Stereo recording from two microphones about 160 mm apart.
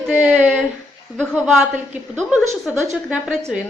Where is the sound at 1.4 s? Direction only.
10° right (ahead or behind).